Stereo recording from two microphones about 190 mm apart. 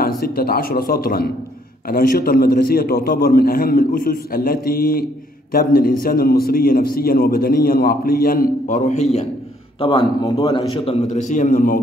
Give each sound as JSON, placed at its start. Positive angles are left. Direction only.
{"t": 0.0, "sound": "a man's voice", "side_deg": 50}
{"t": 9.8, "sound": "a man's voice", "side_deg": 25}